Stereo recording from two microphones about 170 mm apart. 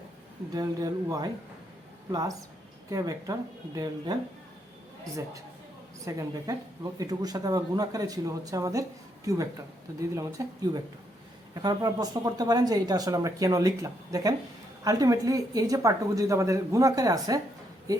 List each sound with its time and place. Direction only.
0.5 s speech: 20° right (ahead or behind)
2.9 s speech: 20° right (ahead or behind)
6.1 s speech: 20° right (ahead or behind)